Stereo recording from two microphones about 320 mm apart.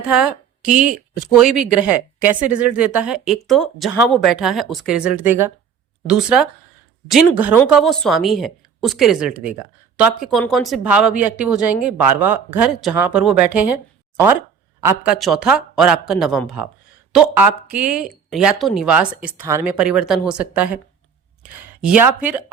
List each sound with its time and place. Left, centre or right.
0.1 s a woman's voice: centre
14.8 s a woman's voice: centre
21.8 s a woman's voice: centre